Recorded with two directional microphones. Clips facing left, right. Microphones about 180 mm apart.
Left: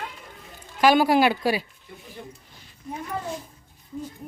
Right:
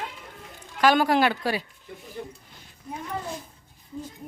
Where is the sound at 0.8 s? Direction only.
10° left (ahead or behind).